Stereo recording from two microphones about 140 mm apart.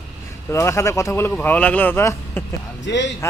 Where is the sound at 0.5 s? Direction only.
20° left (ahead or behind).